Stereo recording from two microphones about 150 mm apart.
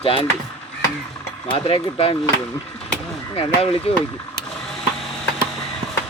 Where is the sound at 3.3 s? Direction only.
40° left (ahead or behind).